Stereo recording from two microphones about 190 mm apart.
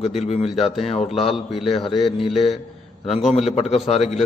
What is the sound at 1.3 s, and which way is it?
Speech, centre (ahead or behind).